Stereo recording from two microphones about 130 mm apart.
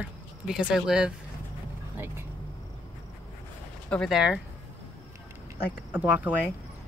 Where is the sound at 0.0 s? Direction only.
10° right (ahead or behind).